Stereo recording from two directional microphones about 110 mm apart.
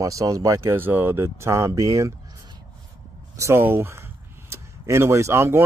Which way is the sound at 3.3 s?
25° right (ahead or behind).